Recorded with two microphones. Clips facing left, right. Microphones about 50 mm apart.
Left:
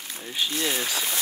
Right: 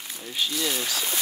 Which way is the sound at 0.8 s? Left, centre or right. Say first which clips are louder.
Left 1 dB; centre.